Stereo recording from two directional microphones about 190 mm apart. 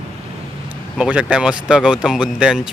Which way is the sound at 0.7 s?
5° right (ahead or behind).